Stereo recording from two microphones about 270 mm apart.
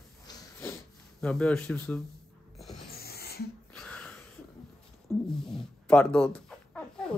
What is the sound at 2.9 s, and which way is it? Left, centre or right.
Music, left.